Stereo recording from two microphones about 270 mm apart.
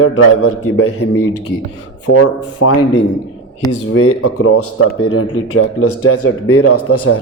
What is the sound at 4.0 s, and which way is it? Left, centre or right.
Speech, left.